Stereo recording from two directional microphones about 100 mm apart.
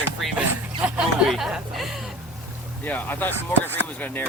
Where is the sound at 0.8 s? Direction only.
5° right (ahead or behind).